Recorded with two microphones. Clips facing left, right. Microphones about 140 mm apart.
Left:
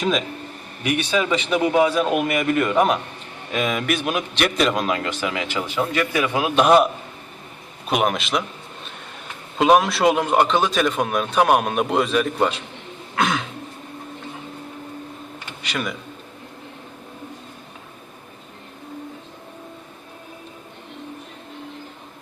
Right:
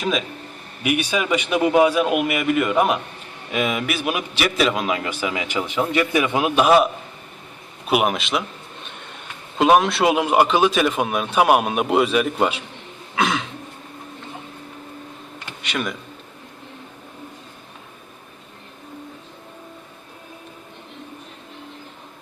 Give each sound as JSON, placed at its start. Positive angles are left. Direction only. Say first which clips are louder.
{"t": 0.8, "sound": "a man's voice", "louder": "even", "side_deg": -10}
{"t": 6.6, "sound": "a man's voice", "louder": "left 1 dB", "side_deg": 0}
{"t": 7.9, "sound": "a man's voice", "louder": "right 1 dB", "side_deg": -5}
{"t": 9.6, "sound": "a man's voice", "louder": "even", "side_deg": 0}
{"t": 13.1, "sound": "a sound", "louder": "even", "side_deg": 0}
{"t": 15.6, "sound": "a man's voice", "louder": "right 1 dB", "side_deg": 0}